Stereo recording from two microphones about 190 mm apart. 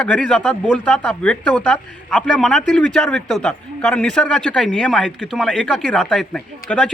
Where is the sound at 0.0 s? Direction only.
5° left (ahead or behind).